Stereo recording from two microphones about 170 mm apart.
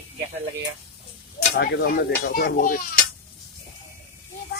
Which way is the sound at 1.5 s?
70° left (ahead or behind).